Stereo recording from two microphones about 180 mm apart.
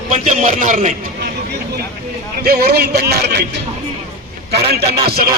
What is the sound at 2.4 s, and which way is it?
Speech, 60° right (ahead or behind).